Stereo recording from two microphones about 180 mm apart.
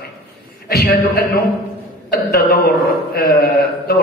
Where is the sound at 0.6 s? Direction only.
60° left (ahead or behind).